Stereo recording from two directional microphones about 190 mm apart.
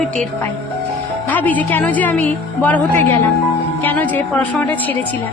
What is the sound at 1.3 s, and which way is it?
A woman's voice, 10° left (ahead or behind).